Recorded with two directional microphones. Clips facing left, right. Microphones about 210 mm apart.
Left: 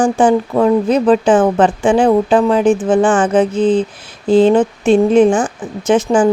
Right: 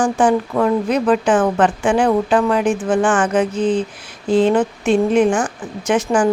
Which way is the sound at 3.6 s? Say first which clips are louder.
Left 5 dB; 90° left.